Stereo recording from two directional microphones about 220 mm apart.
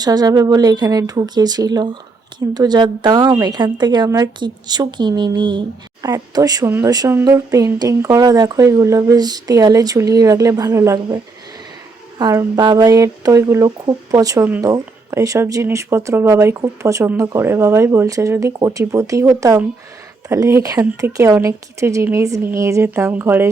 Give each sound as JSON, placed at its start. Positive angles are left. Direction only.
{"t": 0.0, "sound": "a woman's voice", "side_deg": -15}
{"t": 12.2, "sound": "a woman's voice", "side_deg": -15}